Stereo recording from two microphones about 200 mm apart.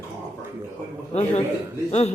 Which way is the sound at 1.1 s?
35° left (ahead or behind).